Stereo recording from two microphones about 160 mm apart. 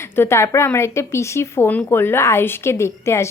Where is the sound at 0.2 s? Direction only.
15° left (ahead or behind).